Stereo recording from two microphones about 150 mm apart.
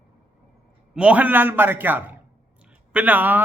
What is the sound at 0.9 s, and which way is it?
A man's voice, 10° right (ahead or behind).